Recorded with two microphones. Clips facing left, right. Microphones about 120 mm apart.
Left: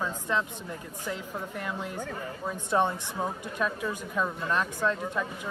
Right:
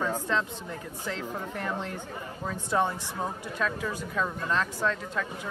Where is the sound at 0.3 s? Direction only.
15° left (ahead or behind).